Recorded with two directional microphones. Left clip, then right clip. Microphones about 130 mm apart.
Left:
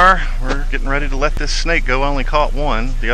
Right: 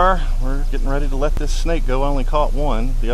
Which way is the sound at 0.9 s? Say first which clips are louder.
Left 4 dB; 55° left (ahead or behind).